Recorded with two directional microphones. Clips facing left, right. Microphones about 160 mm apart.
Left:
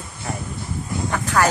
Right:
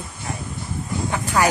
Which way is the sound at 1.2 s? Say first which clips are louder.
Even; 10° right (ahead or behind).